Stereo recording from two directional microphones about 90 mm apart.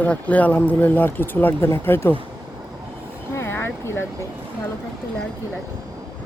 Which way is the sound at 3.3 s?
25° left (ahead or behind).